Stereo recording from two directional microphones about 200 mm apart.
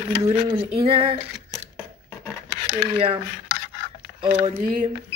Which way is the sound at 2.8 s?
30° right (ahead or behind).